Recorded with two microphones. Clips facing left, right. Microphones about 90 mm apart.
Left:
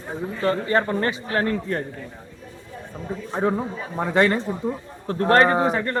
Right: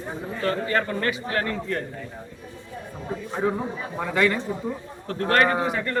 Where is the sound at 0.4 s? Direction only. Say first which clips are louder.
Left 3 dB; 25° left (ahead or behind).